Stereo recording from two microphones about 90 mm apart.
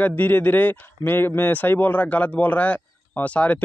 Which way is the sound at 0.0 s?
20° left (ahead or behind).